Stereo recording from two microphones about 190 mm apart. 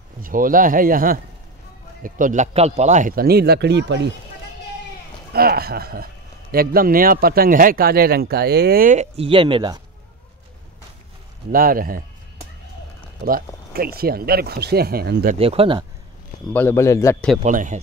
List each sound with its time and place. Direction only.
0.2 s a man's voice: 45° right (ahead or behind); by 4.1 s 65° right (ahead or behind)
5.3 s a man's voice: 55° right (ahead or behind); by 9.8 s 25° right (ahead or behind)
11.5 s a man's voice: 50° right (ahead or behind)
13.7 s a man's voice: 55° right (ahead or behind)
15.3 s speech: 30° right (ahead or behind)
16.5 s a man's voice: 15° left (ahead or behind)
17.4 s speech: 40° right (ahead or behind)